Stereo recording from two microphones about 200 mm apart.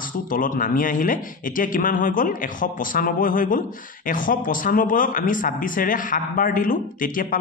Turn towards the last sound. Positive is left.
turn(degrees=45)  # may be behind; listen again after turning